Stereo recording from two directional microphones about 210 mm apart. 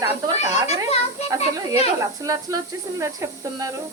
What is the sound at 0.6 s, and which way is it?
Speech, 30° left (ahead or behind).